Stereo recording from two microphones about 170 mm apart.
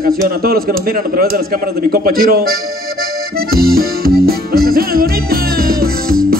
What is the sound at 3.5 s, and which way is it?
Music, 65° right (ahead or behind).